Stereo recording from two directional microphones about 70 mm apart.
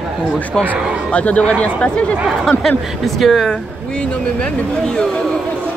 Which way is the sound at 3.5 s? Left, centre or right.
Centre.